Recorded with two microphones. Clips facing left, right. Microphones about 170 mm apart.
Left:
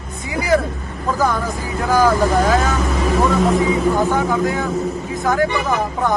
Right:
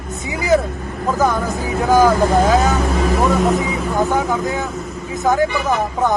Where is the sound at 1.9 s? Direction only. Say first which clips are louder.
Right 2 dB; 20° right (ahead or behind).